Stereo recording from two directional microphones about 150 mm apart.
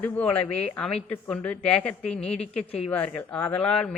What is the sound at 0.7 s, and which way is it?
A woman's voice, 5° left (ahead or behind).